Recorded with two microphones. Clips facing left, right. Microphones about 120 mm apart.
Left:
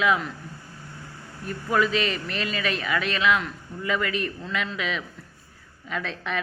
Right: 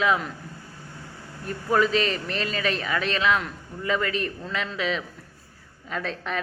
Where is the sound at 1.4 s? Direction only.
35° right (ahead or behind).